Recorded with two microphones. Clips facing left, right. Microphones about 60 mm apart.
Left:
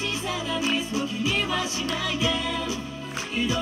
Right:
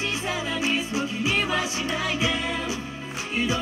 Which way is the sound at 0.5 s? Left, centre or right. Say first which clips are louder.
Left 1 dB; right.